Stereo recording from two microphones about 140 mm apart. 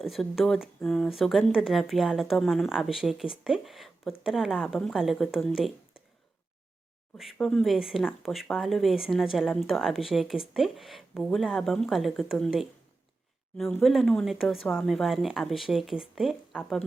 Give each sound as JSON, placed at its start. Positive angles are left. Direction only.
{"t": 0.0, "sound": "speech", "side_deg": 0}
{"t": 7.3, "sound": "speech", "side_deg": 5}
{"t": 13.8, "sound": "speech", "side_deg": 0}